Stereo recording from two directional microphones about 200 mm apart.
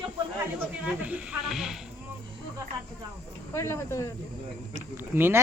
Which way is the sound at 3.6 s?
15° left (ahead or behind).